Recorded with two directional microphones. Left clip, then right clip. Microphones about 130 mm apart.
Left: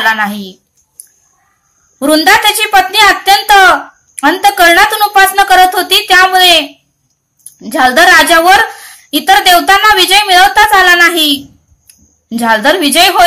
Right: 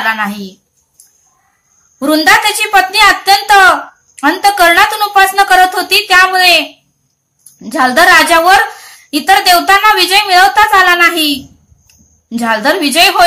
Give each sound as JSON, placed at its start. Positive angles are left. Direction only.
{"t": 0.0, "sound": "a woman's voice", "side_deg": 20}
{"t": 2.0, "sound": "a woman's voice", "side_deg": 15}